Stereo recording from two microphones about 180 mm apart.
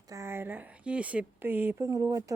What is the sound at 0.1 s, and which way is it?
Speech, 15° right (ahead or behind).